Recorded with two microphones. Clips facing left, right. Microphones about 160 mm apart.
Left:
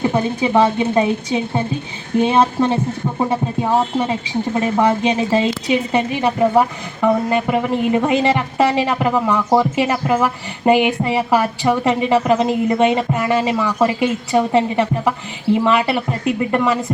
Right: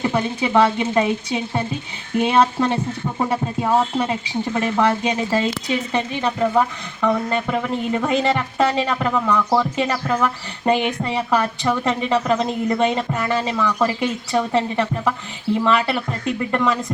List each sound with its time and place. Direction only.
0.1 s speech: 20° left (ahead or behind)
5.6 s speech: 10° left (ahead or behind)
9.1 s speech: 25° left (ahead or behind)
9.7 s a woman's voice: 10° left (ahead or behind)